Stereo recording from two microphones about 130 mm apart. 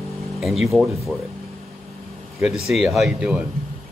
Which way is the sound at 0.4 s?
Centre (ahead or behind).